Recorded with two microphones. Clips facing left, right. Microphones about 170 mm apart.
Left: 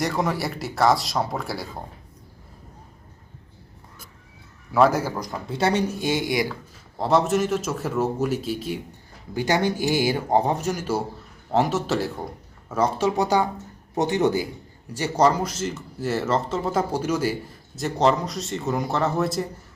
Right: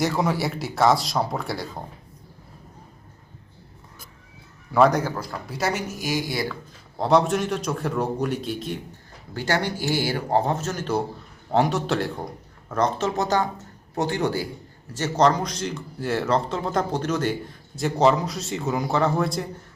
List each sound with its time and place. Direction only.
0.0 s speech: centre (ahead or behind)
4.7 s speech: 5° left (ahead or behind)
5.5 s speech: 30° left (ahead or behind)
7.0 s speech: centre (ahead or behind)
9.3 s speech: 15° left (ahead or behind)